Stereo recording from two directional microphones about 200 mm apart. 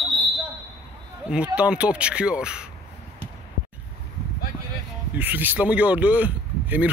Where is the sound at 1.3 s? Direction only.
5° right (ahead or behind).